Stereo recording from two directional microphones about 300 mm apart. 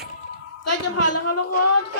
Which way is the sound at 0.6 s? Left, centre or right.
Left.